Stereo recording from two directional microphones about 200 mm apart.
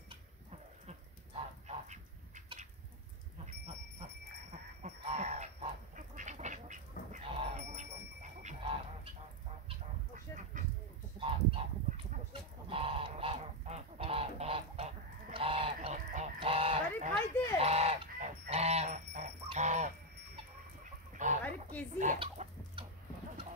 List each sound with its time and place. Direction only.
1.9 s a sound: 35° right (ahead or behind)
4.5 s goose: 35° right (ahead or behind)
7.3 s bicycle bell: 35° right (ahead or behind)
10.1 s a sound: 40° right (ahead or behind)
11.1 s goose: 25° right (ahead or behind)
21.2 s chicken: 40° right (ahead or behind)
22.2 s chicken: 25° right (ahead or behind)